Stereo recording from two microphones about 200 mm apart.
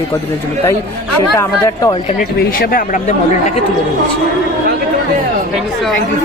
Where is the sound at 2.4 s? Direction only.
45° left (ahead or behind).